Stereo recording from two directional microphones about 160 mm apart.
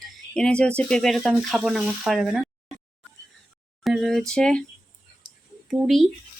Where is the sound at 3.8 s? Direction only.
Centre (ahead or behind).